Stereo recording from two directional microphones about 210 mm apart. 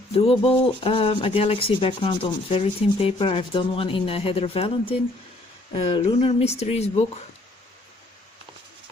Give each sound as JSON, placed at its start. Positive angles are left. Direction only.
{"t": 0.1, "sound": "rub", "side_deg": 30}